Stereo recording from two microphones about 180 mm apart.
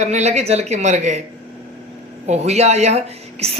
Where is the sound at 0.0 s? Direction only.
40° right (ahead or behind).